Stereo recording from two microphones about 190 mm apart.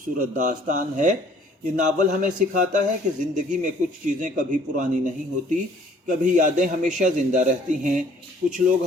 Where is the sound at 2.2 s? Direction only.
40° right (ahead or behind).